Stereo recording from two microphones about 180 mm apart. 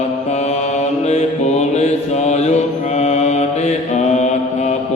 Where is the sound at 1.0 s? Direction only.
40° left (ahead or behind).